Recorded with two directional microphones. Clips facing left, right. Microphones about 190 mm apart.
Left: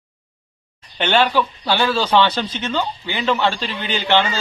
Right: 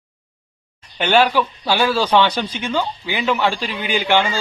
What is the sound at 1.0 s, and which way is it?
Speech, 10° right (ahead or behind).